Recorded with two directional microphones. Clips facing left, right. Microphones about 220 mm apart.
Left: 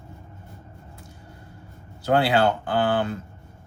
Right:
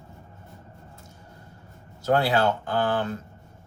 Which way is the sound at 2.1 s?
30° left (ahead or behind).